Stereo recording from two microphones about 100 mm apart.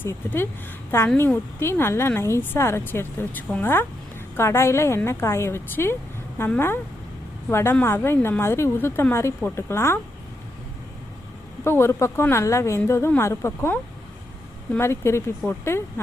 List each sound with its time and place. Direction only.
0.0 s a woman's voice: 20° left (ahead or behind)
11.6 s a woman's voice: 25° left (ahead or behind)
14.8 s a woman's voice: 25° left (ahead or behind)